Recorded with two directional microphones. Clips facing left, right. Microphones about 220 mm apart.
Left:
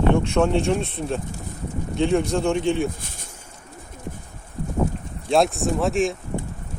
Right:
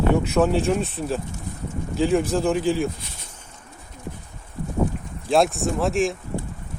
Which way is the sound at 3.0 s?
50° left (ahead or behind).